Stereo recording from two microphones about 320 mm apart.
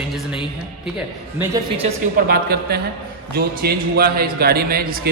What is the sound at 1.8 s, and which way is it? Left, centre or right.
A man's voice, right.